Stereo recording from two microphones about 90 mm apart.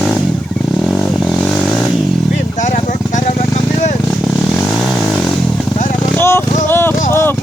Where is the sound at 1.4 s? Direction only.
Centre (ahead or behind).